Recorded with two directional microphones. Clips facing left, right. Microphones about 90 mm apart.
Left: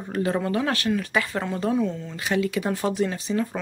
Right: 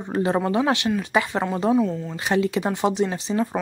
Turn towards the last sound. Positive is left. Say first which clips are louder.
# right 2 dB
turn(degrees=-25)  # may be behind; listen again after turning